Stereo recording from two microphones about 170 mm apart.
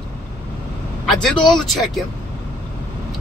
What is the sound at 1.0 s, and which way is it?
Speech, centre (ahead or behind).